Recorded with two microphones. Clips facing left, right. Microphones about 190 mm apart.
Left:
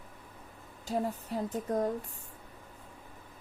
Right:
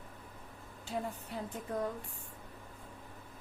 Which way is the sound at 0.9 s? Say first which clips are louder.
Left 6 dB; 40° left (ahead or behind).